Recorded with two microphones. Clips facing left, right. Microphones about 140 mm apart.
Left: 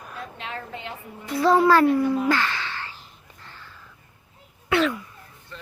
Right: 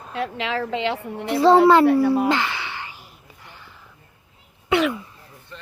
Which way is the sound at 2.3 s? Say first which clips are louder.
Right 1 dB; 15° right (ahead or behind).